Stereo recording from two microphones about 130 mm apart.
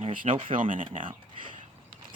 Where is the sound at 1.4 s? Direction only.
90° right.